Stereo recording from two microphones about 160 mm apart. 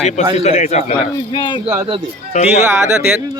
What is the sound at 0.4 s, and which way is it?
Speech, 45° left (ahead or behind).